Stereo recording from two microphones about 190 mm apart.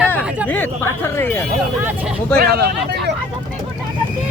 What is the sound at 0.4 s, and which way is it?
Speech, 10° left (ahead or behind).